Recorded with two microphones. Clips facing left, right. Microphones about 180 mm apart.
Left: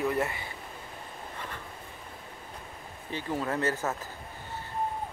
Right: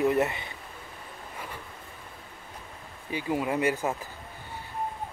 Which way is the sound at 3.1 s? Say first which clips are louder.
Right 3 dB; 10° right (ahead or behind).